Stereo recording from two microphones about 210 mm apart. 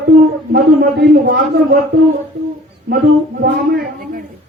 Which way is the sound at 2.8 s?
50° right (ahead or behind).